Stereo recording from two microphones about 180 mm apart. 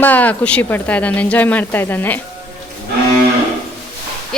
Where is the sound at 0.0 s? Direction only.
10° left (ahead or behind).